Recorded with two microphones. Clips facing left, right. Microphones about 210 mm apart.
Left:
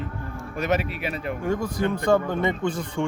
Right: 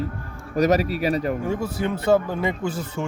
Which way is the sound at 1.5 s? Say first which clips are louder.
Even; 5° right (ahead or behind).